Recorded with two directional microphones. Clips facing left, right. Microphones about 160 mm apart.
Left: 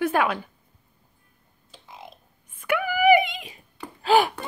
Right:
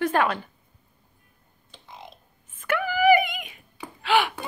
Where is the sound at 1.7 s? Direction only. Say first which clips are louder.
Even; 5° left (ahead or behind); by 4.3 s 40° left (ahead or behind).